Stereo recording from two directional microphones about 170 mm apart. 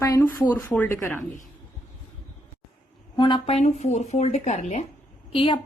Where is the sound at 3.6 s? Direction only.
40° left (ahead or behind).